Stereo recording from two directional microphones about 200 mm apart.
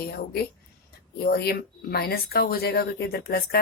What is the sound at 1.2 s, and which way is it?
Speech, 50° left (ahead or behind).